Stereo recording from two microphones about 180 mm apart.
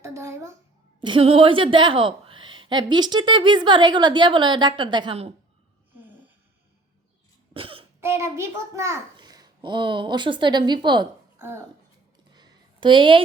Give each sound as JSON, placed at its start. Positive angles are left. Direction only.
{"t": 0.0, "sound": "a sound", "side_deg": -15}
{"t": 1.0, "sound": "a woman's voice", "side_deg": -30}
{"t": 7.5, "sound": "throat clearing", "side_deg": -30}
{"t": 8.0, "sound": "a woman's voice", "side_deg": -15}
{"t": 11.3, "sound": "a child's voice", "side_deg": -15}
{"t": 12.3, "sound": "a sound", "side_deg": -25}